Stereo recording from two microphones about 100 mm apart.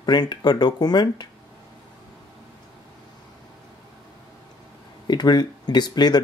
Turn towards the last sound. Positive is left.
turn(degrees=45)  # may be behind; listen again after turning